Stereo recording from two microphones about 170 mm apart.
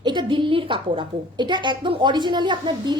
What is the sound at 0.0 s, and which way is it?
A woman's voice, 25° right (ahead or behind).